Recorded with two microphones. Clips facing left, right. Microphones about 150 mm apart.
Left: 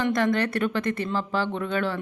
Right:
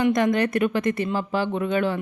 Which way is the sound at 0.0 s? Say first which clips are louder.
Right 3 dB; 15° right (ahead or behind).